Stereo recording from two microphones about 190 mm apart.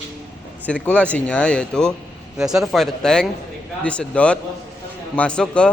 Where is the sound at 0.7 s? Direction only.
5° left (ahead or behind).